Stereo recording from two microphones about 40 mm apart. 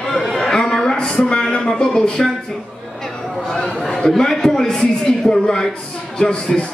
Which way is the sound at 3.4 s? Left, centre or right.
Centre.